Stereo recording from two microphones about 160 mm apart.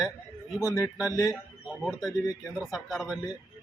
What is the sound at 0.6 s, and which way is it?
Speech, 20° left (ahead or behind).